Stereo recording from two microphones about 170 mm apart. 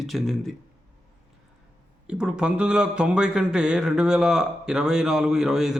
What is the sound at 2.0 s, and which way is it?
A man's voice, 5° right (ahead or behind).